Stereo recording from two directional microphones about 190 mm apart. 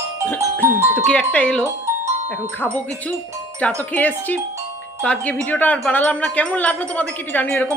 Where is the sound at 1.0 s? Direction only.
5° left (ahead or behind).